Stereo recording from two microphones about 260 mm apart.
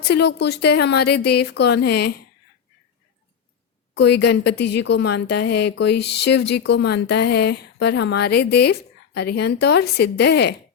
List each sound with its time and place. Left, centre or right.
0.0 s speech: left
3.9 s speech: left